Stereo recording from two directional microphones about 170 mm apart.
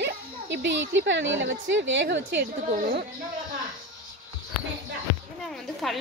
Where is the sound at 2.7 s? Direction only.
60° right (ahead or behind).